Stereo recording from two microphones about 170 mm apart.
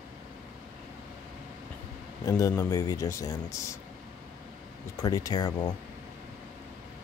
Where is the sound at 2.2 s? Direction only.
20° left (ahead or behind).